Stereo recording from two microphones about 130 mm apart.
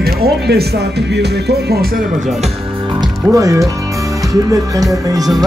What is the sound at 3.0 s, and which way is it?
Speech, 25° right (ahead or behind).